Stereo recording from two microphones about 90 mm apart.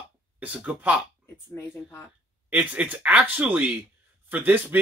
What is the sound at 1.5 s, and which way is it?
Speech, 25° left (ahead or behind).